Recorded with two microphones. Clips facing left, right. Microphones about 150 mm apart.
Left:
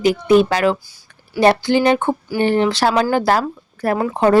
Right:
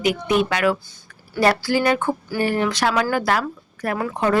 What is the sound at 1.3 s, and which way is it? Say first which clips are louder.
Speech: left 5 dB; 20° left (ahead or behind).